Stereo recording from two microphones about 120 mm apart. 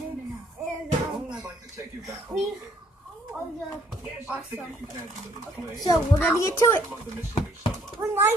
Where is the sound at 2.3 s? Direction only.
20° right (ahead or behind).